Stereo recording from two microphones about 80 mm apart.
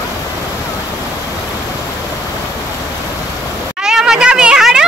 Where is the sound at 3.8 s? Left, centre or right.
Centre.